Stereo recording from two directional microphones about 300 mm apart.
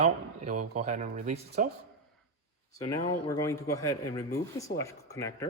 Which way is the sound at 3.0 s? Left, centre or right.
Centre.